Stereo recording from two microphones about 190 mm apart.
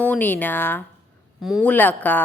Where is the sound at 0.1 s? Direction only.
10° left (ahead or behind).